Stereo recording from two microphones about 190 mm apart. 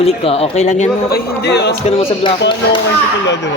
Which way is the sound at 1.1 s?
55° left (ahead or behind).